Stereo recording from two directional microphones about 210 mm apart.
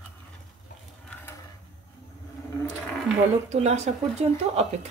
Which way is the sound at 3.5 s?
30° right (ahead or behind).